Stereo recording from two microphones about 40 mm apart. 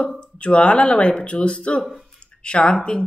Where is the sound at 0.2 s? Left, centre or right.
Left.